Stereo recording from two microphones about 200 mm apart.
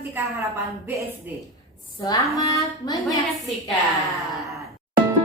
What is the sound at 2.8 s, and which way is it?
Speech, 20° left (ahead or behind).